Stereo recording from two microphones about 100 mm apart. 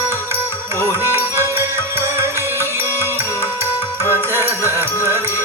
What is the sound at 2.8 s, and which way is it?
Music, 25° left (ahead or behind).